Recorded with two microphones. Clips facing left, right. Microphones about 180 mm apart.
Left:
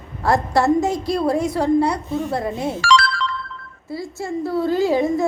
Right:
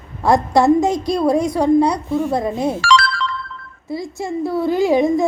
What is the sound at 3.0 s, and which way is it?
Ringtone, 65° right (ahead or behind).